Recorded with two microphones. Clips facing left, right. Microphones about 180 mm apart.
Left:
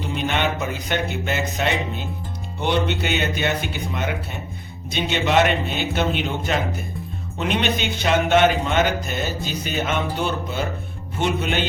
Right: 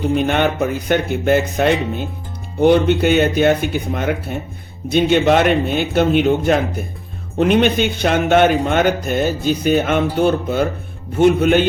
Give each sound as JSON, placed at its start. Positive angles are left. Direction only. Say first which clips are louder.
{"t": 0.1, "sound": "a man's voice", "louder": "right 5 dB", "side_deg": -50}